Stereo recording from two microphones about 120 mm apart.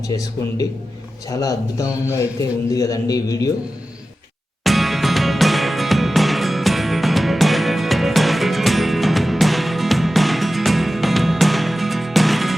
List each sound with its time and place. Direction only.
0.1 s a man's voice: 30° left (ahead or behind)
4.6 s music: centre (ahead or behind)